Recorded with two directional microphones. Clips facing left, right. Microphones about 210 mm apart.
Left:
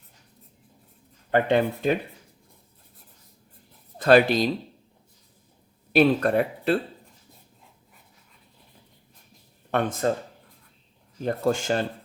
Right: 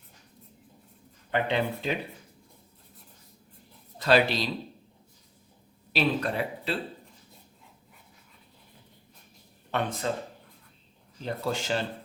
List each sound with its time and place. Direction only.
1.3 s speech: 50° left (ahead or behind)
3.9 s speech: 50° left (ahead or behind)
5.9 s speech: 50° left (ahead or behind)
9.7 s speech: 45° left (ahead or behind)
11.2 s speech: 50° left (ahead or behind)